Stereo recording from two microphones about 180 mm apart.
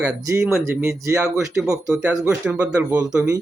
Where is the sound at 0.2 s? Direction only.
15° right (ahead or behind).